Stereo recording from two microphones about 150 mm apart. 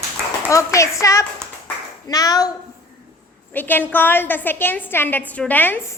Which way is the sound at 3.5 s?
10° left (ahead or behind).